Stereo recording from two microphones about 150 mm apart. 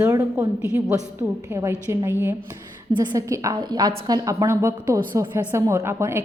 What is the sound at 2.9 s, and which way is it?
A woman's voice, 25° right (ahead or behind).